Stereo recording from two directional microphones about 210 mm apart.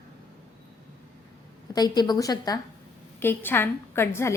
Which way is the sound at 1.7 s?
20° left (ahead or behind).